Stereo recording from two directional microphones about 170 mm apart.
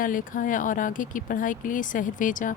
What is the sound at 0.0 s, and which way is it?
Speech, 55° left (ahead or behind).